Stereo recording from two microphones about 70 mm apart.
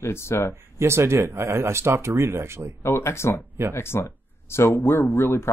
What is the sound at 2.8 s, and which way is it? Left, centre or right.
Speech, left.